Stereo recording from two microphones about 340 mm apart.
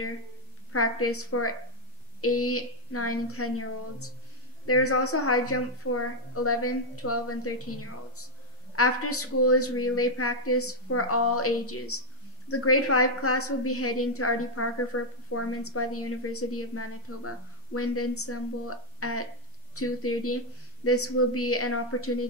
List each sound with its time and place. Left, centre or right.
0.7 s a woman's voice: left